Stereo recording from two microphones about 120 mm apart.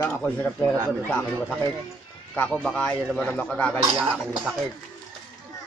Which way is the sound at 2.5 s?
5° left (ahead or behind).